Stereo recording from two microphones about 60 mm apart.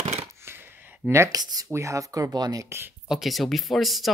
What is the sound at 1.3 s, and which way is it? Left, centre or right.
Speech, right.